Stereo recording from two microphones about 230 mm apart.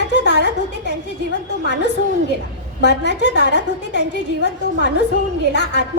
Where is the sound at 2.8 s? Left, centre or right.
Left.